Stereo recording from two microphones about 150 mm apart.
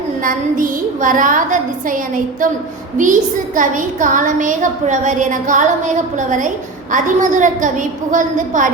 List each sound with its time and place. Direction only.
0.2 s a woman's voice: 65° right (ahead or behind)